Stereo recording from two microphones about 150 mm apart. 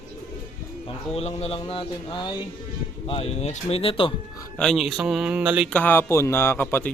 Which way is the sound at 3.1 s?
40° left (ahead or behind).